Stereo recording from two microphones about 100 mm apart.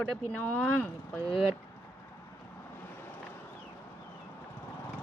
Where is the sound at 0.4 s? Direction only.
15° left (ahead or behind).